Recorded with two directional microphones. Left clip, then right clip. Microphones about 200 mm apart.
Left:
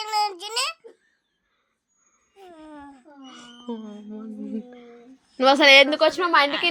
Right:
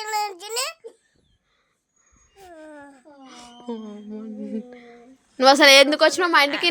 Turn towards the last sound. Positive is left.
turn(degrees=-55)  # may be behind; listen again after turning